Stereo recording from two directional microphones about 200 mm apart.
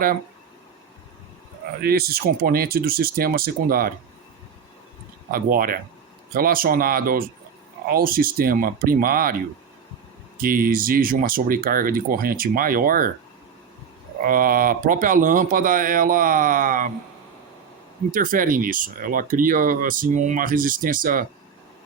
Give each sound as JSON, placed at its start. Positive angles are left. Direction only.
{"t": 1.8, "sound": "speech", "side_deg": -50}
{"t": 5.3, "sound": "speech", "side_deg": -45}
{"t": 10.3, "sound": "speech", "side_deg": -45}
{"t": 14.3, "sound": "speech", "side_deg": -45}
{"t": 18.1, "sound": "speech", "side_deg": -45}